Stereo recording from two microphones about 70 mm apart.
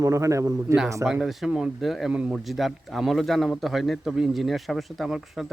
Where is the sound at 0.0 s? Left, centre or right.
Right.